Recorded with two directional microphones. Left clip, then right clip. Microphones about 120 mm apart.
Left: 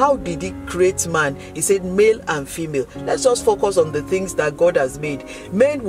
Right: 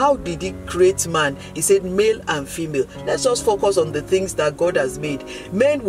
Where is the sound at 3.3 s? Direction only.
40° left (ahead or behind).